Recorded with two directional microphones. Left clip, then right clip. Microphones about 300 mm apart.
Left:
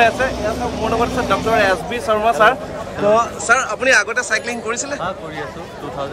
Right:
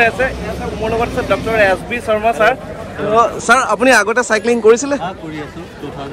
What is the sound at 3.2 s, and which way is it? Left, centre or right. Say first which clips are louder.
A man's voice: right 4 dB; centre.